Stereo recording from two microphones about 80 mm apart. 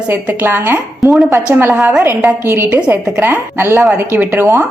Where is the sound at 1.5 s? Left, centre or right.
Right.